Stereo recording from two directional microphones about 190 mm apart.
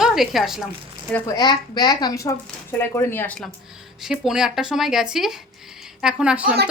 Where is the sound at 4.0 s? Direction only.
5° right (ahead or behind).